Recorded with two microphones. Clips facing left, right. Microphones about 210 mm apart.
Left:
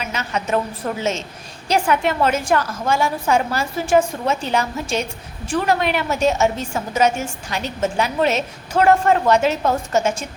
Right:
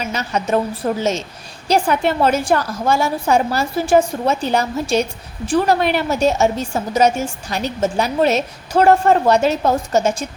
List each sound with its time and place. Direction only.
0.0 s a woman's voice: 35° right (ahead or behind)